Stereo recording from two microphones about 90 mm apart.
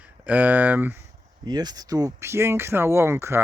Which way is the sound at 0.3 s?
20° right (ahead or behind).